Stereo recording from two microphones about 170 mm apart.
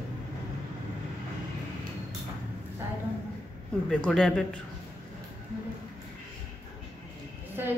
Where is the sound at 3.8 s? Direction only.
5° left (ahead or behind).